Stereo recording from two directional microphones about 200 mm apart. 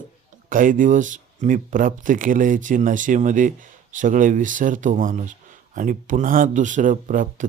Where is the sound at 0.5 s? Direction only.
40° right (ahead or behind).